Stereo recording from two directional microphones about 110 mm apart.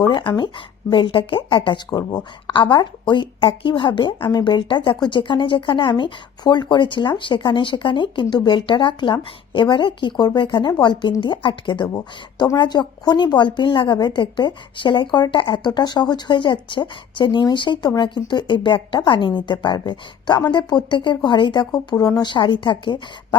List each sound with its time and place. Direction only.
0.0 s a woman's voice: 40° left (ahead or behind)